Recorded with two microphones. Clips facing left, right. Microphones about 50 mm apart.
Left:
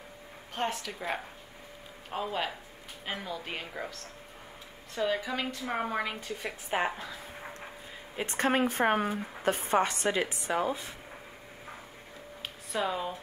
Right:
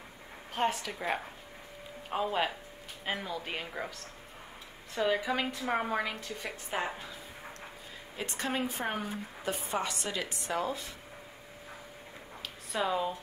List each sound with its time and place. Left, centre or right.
0.6 s a woman's voice: centre
4.9 s a woman's voice: centre
6.7 s speech: left
8.3 s speech: left
10.4 s speech: centre
12.7 s a woman's voice: centre